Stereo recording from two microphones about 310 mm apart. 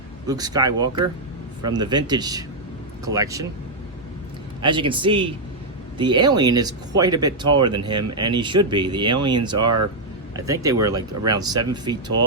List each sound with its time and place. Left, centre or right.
0.3 s speech: centre
4.6 s speech: centre